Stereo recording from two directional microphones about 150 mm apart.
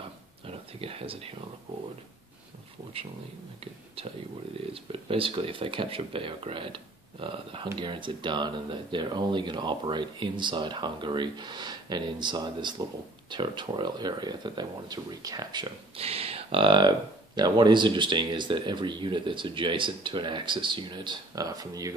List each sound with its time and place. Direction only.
0.5 s speech: 40° right (ahead or behind)
4.6 s speech: 40° right (ahead or behind)
16.0 s speech: 40° right (ahead or behind); by 21.9 s 25° right (ahead or behind)